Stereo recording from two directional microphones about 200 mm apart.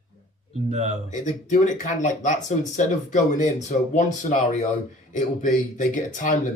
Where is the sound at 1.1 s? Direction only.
40° left (ahead or behind).